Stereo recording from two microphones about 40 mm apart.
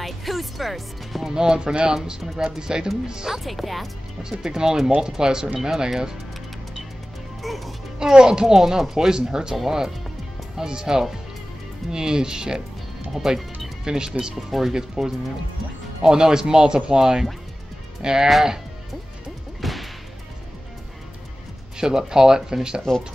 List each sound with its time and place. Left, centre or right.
0.0 s speech: centre
1.3 s speech: centre
3.3 s speech: centre
4.2 s speech: centre
7.4 s music: centre
8.0 s speech: centre
8.5 s speech: centre
14.3 s speech: centre
14.7 s speech: centre
19.6 s whip: centre
21.7 s speech: centre